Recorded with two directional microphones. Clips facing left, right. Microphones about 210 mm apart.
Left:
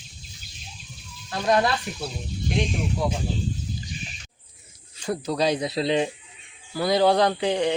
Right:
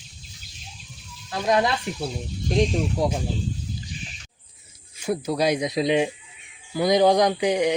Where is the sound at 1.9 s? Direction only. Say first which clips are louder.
Right 4 dB; 25° right (ahead or behind).